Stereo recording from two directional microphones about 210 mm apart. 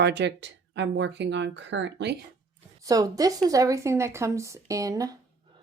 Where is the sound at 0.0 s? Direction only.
55° right (ahead or behind).